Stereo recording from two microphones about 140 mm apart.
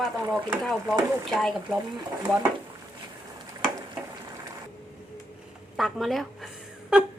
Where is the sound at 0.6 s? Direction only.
5° left (ahead or behind).